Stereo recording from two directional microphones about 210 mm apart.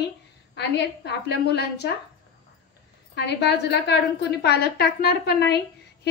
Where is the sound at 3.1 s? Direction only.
55° left (ahead or behind).